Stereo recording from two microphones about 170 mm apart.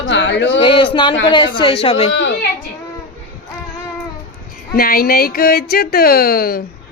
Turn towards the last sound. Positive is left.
turn(degrees=60)  # may be behind; listen again after turning